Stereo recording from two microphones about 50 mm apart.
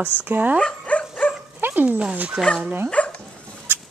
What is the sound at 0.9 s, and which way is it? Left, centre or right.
Dog, left.